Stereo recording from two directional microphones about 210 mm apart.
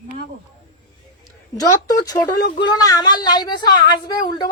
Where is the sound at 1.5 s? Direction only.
15° left (ahead or behind).